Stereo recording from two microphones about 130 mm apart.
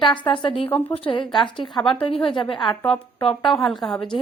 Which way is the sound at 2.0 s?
45° left (ahead or behind).